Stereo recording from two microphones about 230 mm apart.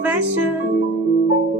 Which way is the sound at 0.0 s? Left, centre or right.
Centre.